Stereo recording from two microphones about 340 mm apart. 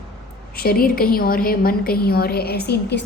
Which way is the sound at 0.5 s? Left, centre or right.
Left.